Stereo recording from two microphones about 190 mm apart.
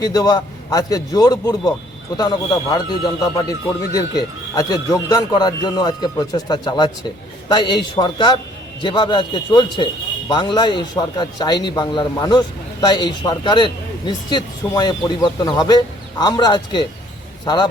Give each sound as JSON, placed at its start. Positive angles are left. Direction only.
{"t": 0.0, "sound": "a man's voice", "side_deg": 20}